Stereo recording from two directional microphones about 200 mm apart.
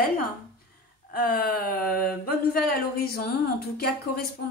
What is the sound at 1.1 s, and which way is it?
Speech, 50° left (ahead or behind).